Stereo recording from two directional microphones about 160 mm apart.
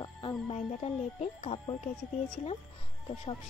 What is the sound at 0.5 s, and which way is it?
Speech, 40° left (ahead or behind).